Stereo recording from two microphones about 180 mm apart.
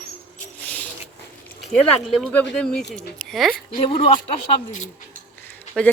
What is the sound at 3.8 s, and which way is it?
Speech, 30° left (ahead or behind).